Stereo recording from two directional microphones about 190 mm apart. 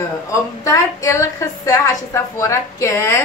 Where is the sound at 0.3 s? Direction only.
15° left (ahead or behind).